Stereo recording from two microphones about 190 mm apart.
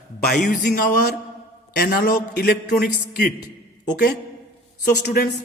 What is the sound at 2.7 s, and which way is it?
Speech, 50° left (ahead or behind).